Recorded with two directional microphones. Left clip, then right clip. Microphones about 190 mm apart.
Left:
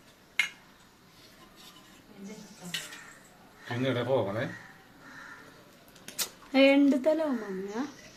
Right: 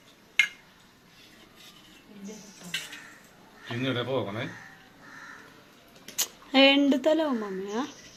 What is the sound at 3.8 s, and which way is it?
Speech, 35° left (ahead or behind).